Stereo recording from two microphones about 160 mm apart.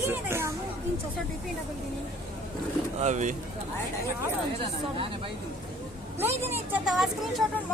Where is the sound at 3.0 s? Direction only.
50° right (ahead or behind).